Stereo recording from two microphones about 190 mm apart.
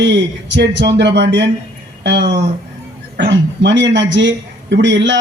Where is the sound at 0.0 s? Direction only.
70° right (ahead or behind).